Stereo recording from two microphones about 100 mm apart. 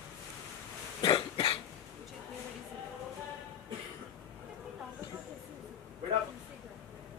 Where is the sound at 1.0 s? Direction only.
60° left (ahead or behind).